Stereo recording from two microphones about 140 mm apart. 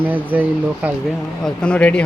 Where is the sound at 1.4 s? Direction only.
10° left (ahead or behind).